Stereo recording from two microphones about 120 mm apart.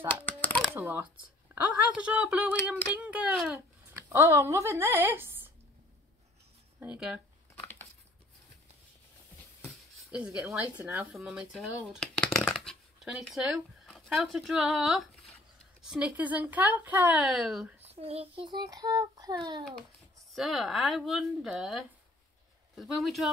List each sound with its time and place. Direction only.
0.1 s coin: 15° left (ahead or behind)
0.7 s speech: 20° right (ahead or behind)
3.9 s speech: 25° right (ahead or behind)
6.8 s speech: 10° right (ahead or behind)
7.5 s a sound: 15° left (ahead or behind)
10.1 s speech: 10° right (ahead or behind)
11.1 s speech: centre (ahead or behind)
17.3 s a woman's voice: centre (ahead or behind)
17.8 s a child's voice: 55° right (ahead or behind)
18.5 s child singing: 35° right (ahead or behind)
20.3 s a woman's voice: centre (ahead or behind)